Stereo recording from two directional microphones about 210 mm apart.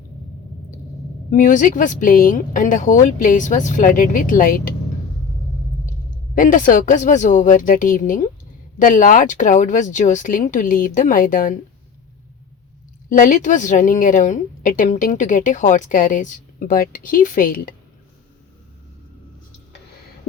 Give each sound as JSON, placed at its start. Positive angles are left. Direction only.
{"t": 1.3, "sound": "a woman's voice", "side_deg": 40}
{"t": 6.3, "sound": "a woman's voice", "side_deg": 40}
{"t": 13.1, "sound": "a woman's voice", "side_deg": 40}